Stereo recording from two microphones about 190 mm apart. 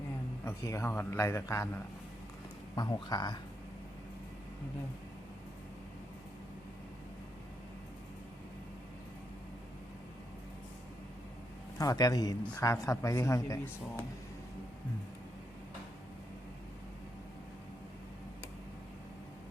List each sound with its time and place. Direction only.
0.4 s a man's voice: 15° left (ahead or behind)
11.8 s a man's voice: 20° left (ahead or behind)